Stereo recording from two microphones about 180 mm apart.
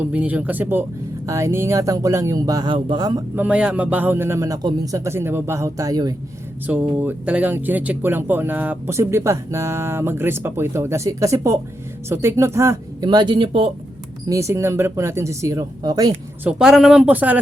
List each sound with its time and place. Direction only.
0.0 s speech: 10° right (ahead or behind); by 3.2 s 25° right (ahead or behind)
3.3 s speech: 10° right (ahead or behind)
6.7 s speech: 10° right (ahead or behind); by 13.7 s 30° right (ahead or behind)
14.3 s speech: 15° right (ahead or behind)
16.4 s speech: 5° right (ahead or behind)